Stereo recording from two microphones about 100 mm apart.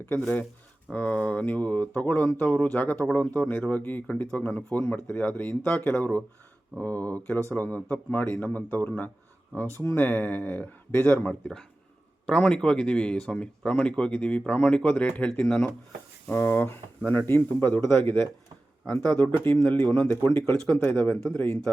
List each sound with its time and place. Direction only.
0.2 s speech: 15° left (ahead or behind)
16.2 s speech: 20° left (ahead or behind)